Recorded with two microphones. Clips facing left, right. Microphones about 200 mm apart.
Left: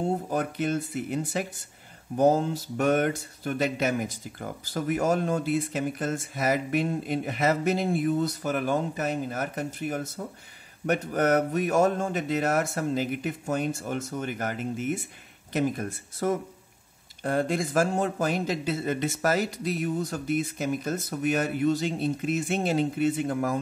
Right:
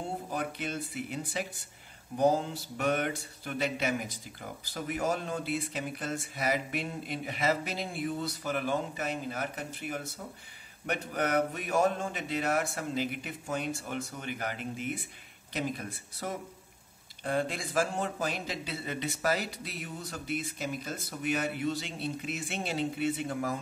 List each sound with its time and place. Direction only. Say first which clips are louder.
0.3 s speech: left 8 dB; 45° left (ahead or behind)